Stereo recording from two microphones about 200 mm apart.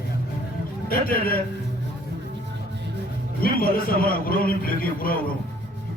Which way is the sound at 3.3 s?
45° left (ahead or behind).